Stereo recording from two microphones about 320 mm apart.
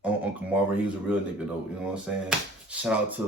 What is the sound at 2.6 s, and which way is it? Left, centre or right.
Speech, centre.